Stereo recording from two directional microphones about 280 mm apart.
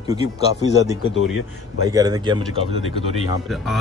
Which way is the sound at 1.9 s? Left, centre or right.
Centre.